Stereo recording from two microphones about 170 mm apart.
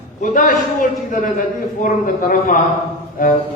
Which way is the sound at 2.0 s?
55° left (ahead or behind).